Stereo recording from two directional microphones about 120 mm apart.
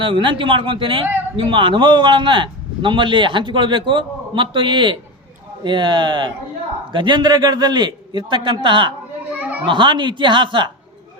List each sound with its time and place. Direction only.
0.0 s a man's voice: 45° right (ahead or behind)